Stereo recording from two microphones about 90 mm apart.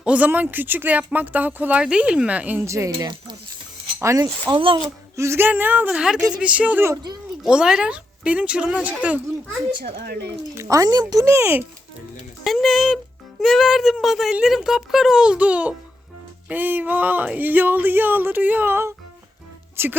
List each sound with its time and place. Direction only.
0.0 s speech: 15° right (ahead or behind)
2.6 s speech: 35° right (ahead or behind)
4.5 s speech: 70° right (ahead or behind)
5.1 s speech: 30° right (ahead or behind)
5.5 s speech: 20° right (ahead or behind)
5.9 s speech: 10° right (ahead or behind)
10.5 s speech: 35° right (ahead or behind)
11.3 s speech: 30° right (ahead or behind)
12.5 s speech: centre (ahead or behind); by 20.0 s 25° right (ahead or behind)